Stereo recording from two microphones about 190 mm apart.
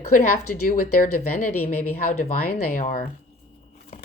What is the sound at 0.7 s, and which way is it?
Speech, 45° left (ahead or behind).